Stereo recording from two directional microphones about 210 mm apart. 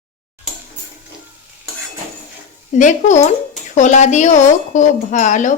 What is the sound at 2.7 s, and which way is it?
A woman's voice, 35° left (ahead or behind).